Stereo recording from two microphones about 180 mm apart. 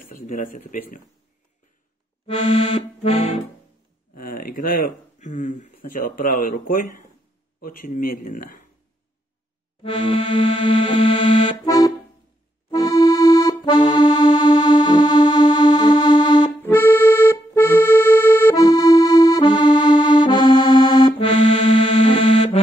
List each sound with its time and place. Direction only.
0.0 s speech: 50° left (ahead or behind)
2.2 s accordion: 30° left (ahead or behind)
4.1 s speech: 50° left (ahead or behind)
9.8 s music: 30° left (ahead or behind)
12.7 s accordion: 20° left (ahead or behind)
16.6 s accordion: 10° left (ahead or behind); by 22.6 s 35° left (ahead or behind)